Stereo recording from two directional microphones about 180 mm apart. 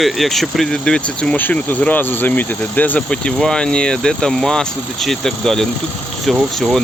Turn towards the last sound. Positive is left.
turn(degrees=0)  # may be behind; listen again after turning